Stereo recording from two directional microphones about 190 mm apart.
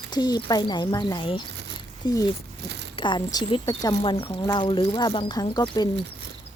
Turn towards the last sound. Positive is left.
turn(degrees=20)  # may be behind; listen again after turning